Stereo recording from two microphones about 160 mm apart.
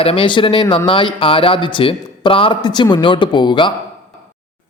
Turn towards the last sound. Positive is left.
turn(degrees=30)  # may be behind; listen again after turning